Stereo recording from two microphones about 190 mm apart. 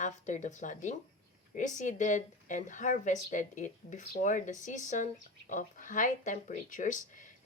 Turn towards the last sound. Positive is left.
turn(degrees=40)  # may be behind; listen again after turning